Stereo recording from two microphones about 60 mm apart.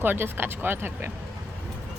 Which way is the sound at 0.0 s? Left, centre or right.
Right.